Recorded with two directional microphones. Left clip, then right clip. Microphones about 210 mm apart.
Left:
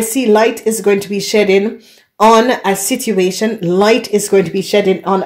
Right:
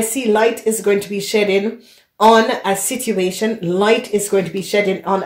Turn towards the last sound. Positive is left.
turn(degrees=50)  # may be behind; listen again after turning